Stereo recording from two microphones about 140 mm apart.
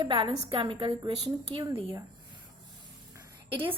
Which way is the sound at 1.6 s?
20° right (ahead or behind).